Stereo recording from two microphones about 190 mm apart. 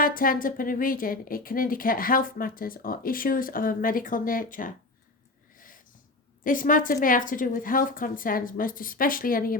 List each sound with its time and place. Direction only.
0.0 s a woman's voice: 50° left (ahead or behind)
5.5 s snort: 45° left (ahead or behind)
6.4 s a woman's voice: 45° left (ahead or behind)